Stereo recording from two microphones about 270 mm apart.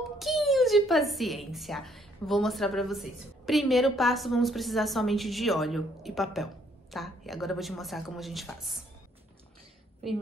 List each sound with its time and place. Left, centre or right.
0.2 s a woman's voice: centre